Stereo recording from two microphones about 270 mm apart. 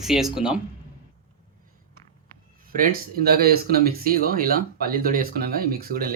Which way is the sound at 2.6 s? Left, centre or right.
Right.